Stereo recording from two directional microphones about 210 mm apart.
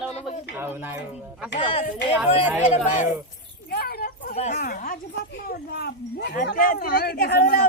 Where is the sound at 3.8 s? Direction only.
45° left (ahead or behind).